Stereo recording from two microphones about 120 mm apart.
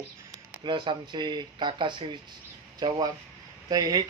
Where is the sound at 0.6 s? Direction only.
40° right (ahead or behind).